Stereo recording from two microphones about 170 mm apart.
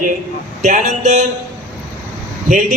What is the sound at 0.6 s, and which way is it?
Speech, 45° right (ahead or behind).